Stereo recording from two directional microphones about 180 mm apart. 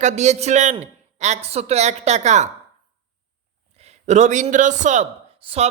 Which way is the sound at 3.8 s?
35° right (ahead or behind).